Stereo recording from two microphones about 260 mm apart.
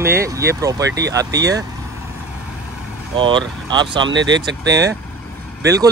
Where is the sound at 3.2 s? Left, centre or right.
Centre.